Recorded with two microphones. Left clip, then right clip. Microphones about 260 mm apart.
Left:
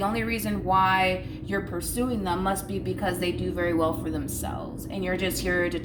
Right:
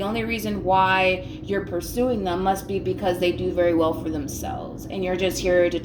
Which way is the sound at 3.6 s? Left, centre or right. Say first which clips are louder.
Right 4 dB; left.